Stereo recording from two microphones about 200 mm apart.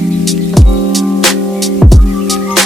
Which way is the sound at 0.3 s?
Centre (ahead or behind).